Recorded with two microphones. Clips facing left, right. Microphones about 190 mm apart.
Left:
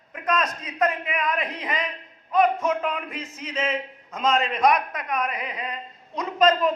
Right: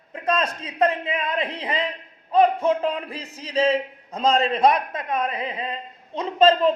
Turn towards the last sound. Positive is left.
turn(degrees=-30)  # may be behind; listen again after turning